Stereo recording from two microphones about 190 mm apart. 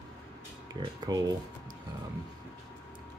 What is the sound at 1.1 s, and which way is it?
Speech, 20° right (ahead or behind).